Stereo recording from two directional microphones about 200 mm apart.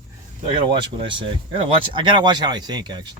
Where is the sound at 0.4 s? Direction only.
25° right (ahead or behind).